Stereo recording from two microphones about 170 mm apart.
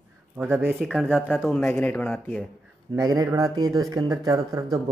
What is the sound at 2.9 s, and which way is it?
Speech, 20° right (ahead or behind).